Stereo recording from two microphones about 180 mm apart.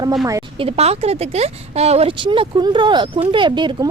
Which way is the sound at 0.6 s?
35° right (ahead or behind).